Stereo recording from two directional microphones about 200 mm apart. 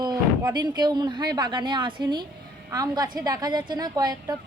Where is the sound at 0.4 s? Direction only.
20° right (ahead or behind).